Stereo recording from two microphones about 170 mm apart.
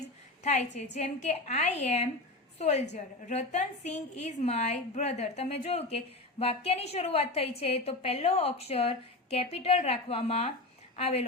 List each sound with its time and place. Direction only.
0.4 s a woman's voice: 45° left (ahead or behind)